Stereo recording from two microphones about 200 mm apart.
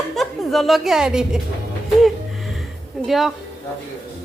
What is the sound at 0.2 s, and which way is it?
A woman's voice, centre (ahead or behind).